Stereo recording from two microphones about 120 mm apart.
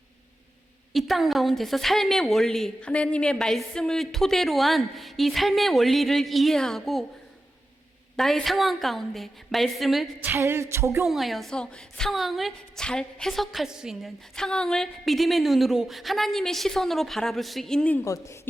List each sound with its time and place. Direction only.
0.9 s a woman's voice: centre (ahead or behind)
8.1 s a woman's voice: centre (ahead or behind)
10.2 s music: 20° right (ahead or behind)
11.0 s a woman's voice: centre (ahead or behind)
18.0 s a woman's voice: 25° left (ahead or behind)